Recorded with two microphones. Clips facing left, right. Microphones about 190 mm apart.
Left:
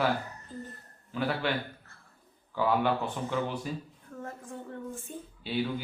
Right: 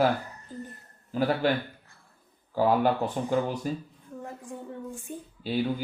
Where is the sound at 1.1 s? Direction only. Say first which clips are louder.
Right 5 dB; 40° right (ahead or behind).